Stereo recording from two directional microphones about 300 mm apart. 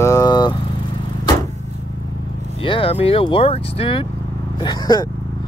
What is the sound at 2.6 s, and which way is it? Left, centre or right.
Speech, centre.